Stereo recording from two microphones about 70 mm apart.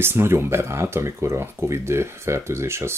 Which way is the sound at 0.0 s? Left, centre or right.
Right.